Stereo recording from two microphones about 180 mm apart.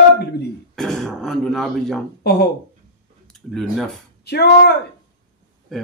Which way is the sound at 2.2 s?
65° left (ahead or behind).